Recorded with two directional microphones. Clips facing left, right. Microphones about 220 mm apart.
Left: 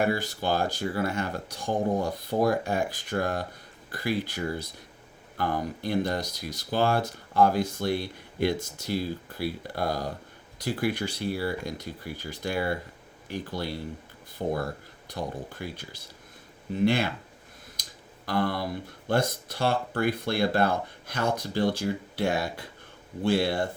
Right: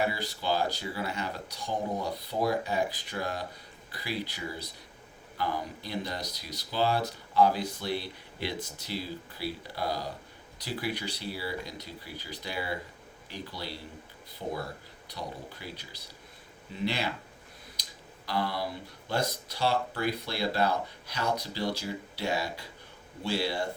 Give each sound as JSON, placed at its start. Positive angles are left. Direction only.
{"t": 0.0, "sound": "speech", "side_deg": 50}
{"t": 17.8, "sound": "a sound", "side_deg": 50}
{"t": 18.3, "sound": "speech", "side_deg": 50}